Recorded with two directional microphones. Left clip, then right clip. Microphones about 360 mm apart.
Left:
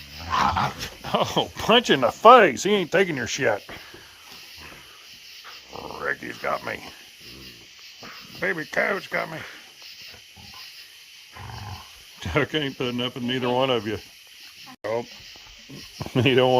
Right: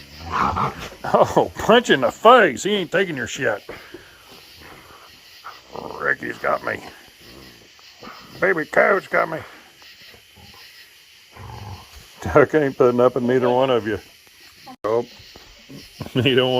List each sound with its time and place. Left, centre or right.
1.0 s speech: centre
5.7 s a sound: centre
8.4 s speech: centre
12.2 s speech: centre
14.8 s a sound: centre
16.0 s speech: centre